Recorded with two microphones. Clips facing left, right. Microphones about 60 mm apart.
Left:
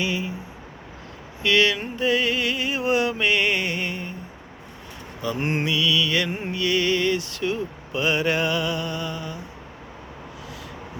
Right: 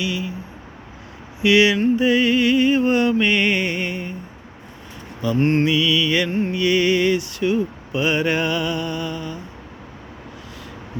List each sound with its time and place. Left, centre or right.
0.0 s speech: left
1.4 s a sound: centre
1.8 s mantra: centre
5.4 s mantra: centre
5.6 s mantra: centre